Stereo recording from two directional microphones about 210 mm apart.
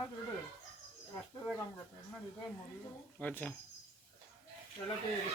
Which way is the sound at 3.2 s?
10° left (ahead or behind).